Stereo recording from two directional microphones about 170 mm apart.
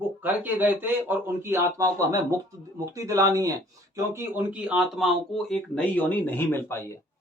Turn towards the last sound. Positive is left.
turn(degrees=10)  # may be behind; listen again after turning